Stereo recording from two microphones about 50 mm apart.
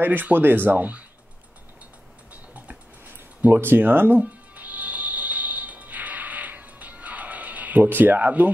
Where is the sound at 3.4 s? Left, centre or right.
Right.